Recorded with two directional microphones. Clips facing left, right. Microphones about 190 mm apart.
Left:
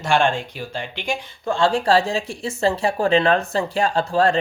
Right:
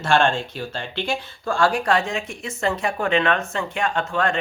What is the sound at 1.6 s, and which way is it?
Speech, 25° left (ahead or behind).